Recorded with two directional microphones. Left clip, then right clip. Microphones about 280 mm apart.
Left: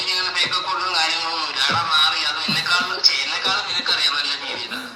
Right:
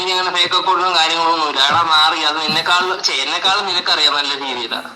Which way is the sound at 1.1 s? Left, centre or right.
Centre.